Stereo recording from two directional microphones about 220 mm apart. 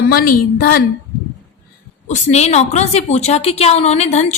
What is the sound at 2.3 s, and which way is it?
A woman's voice, 30° left (ahead or behind).